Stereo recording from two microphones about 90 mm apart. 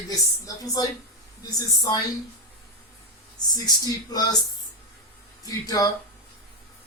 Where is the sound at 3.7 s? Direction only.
45° left (ahead or behind).